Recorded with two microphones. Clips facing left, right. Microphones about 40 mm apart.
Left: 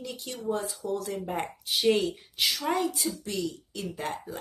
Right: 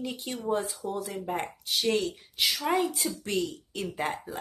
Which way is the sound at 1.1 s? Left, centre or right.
Centre.